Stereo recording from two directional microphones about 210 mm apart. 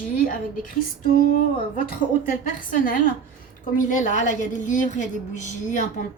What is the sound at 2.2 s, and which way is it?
A woman's voice, 40° left (ahead or behind).